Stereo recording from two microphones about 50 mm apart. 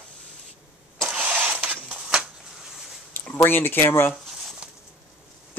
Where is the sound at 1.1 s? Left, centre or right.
Right.